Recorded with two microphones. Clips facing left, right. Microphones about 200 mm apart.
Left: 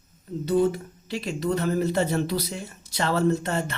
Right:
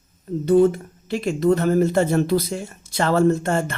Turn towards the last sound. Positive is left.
turn(degrees=-50)  # may be behind; listen again after turning